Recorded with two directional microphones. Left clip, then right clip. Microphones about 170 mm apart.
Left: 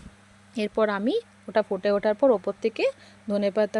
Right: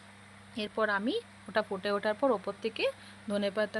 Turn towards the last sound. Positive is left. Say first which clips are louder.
# left 7 dB
turn(degrees=40)  # may be behind; listen again after turning